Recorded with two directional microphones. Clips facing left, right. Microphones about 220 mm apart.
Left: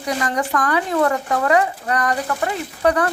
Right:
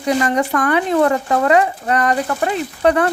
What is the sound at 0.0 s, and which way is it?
Speech, 25° right (ahead or behind).